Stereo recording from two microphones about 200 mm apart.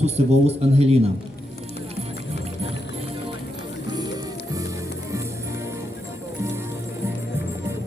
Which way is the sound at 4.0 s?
20° right (ahead or behind).